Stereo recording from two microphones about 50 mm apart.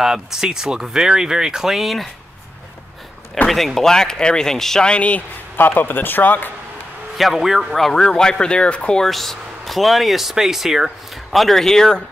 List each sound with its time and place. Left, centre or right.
0.0 s speech: centre
3.4 s speech: centre
4.8 s speech: left
5.7 s speech: left
7.2 s speech: centre
7.7 s speech: centre
9.0 s speech: centre
11.3 s speech: centre